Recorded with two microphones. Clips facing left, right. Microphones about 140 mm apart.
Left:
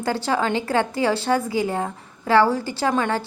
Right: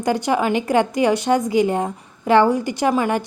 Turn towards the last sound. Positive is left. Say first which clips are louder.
# right 3 dB
turn(degrees=-15)  # may be behind; listen again after turning